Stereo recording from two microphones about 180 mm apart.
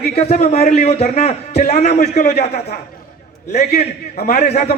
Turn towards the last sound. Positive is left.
turn(degrees=35)  # may be behind; listen again after turning